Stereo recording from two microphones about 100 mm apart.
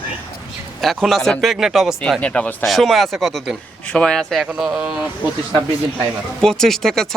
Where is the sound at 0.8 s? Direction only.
Centre (ahead or behind).